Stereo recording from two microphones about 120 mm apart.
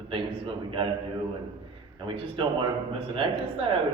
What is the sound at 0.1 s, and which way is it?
Speech, 45° right (ahead or behind).